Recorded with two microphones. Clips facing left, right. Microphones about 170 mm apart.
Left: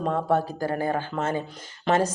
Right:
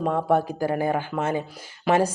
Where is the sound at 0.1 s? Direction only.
15° right (ahead or behind).